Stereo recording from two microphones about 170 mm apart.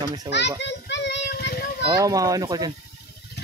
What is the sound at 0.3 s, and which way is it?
Children playing, 90° left.